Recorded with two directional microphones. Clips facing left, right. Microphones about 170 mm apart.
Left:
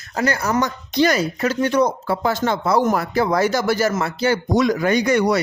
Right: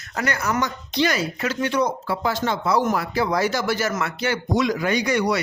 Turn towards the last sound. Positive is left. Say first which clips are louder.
# left 4 dB
turn(degrees=50)  # may be behind; listen again after turning